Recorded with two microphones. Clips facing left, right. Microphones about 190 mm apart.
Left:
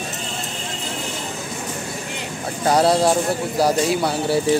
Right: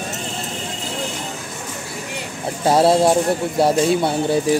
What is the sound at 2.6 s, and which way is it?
Speech, 25° right (ahead or behind).